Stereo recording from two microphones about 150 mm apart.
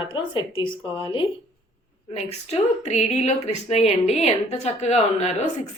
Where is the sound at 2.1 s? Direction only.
45° left (ahead or behind).